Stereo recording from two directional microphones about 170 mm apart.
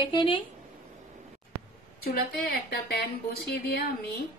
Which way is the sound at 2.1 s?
65° left (ahead or behind).